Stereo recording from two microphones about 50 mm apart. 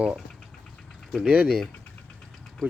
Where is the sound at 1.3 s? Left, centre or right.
Right.